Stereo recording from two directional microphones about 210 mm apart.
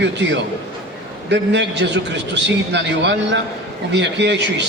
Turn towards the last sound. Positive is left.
turn(degrees=-55)  # may be behind; listen again after turning